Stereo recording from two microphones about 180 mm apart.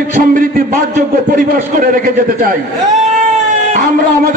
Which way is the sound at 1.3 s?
50° right (ahead or behind).